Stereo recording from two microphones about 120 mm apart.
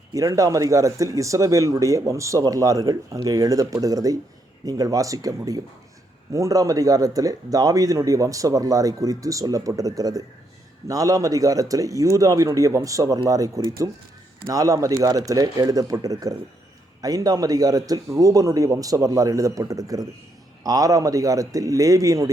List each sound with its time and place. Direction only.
0.1 s speech: 25° right (ahead or behind)